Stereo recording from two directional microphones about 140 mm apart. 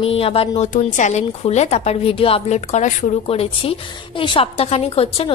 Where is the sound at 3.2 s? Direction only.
45° left (ahead or behind).